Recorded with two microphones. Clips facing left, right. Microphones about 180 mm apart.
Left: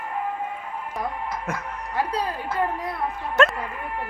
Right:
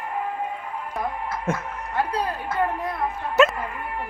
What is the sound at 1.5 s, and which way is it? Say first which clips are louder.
Speech: right 7 dB; 25° right (ahead or behind).